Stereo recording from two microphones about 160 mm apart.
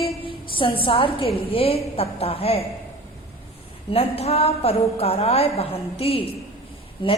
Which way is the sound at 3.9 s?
35° left (ahead or behind).